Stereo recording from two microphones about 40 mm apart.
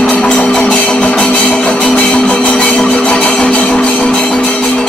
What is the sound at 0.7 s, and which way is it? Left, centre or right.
Music, left.